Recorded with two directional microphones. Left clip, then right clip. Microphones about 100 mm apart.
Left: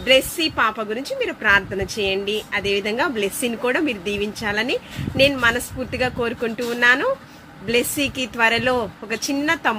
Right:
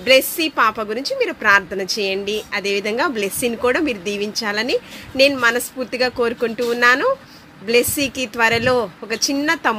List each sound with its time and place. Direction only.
0.0 s a woman's voice: 50° right (ahead or behind)